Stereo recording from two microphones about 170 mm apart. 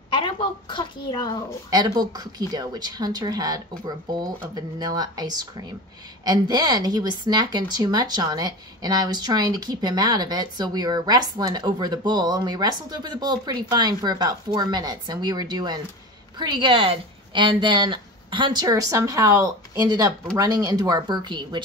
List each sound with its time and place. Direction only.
0.1 s a woman's voice: 30° left (ahead or behind)
1.7 s a woman's voice: 25° right (ahead or behind)